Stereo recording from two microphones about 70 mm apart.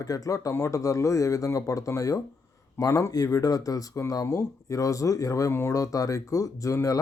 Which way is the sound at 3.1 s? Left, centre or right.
Left.